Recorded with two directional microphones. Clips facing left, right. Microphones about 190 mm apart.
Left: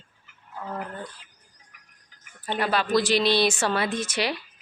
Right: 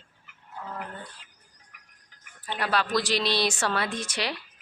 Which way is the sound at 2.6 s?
Centre (ahead or behind).